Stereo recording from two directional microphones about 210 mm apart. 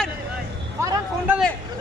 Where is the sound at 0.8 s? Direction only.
15° right (ahead or behind).